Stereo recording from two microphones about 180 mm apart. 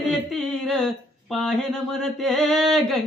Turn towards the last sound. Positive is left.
turn(degrees=0)  # may be behind; listen again after turning